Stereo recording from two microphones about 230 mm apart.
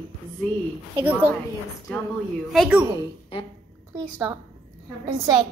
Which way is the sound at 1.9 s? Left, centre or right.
Centre.